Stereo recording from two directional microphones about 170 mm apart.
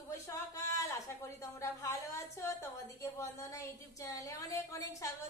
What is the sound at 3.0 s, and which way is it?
A woman's voice, 15° left (ahead or behind).